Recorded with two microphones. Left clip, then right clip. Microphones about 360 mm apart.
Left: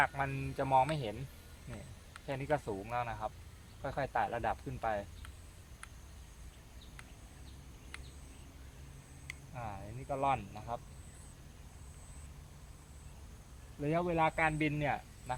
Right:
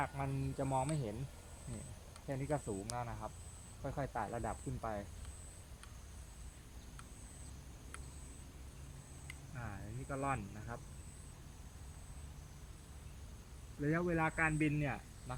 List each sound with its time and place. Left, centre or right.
0.0 s speech: left
2.2 s speech: left
9.2 s speech: centre
13.8 s speech: centre